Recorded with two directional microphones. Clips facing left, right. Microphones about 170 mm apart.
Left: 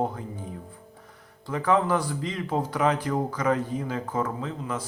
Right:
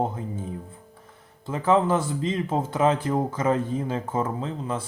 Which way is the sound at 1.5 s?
25° right (ahead or behind).